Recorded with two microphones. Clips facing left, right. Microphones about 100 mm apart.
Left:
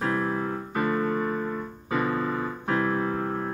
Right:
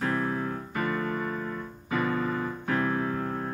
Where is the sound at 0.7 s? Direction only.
25° left (ahead or behind).